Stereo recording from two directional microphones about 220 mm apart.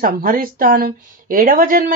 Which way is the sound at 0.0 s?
40° right (ahead or behind).